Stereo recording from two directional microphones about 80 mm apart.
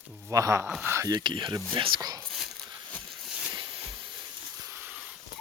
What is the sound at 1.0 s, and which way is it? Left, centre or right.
Speech, right.